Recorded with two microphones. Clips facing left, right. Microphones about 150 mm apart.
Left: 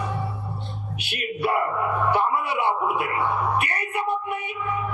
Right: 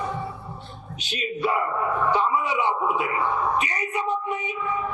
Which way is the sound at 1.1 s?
60° left (ahead or behind).